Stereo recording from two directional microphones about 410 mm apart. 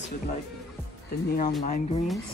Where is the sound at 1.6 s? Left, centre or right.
Centre.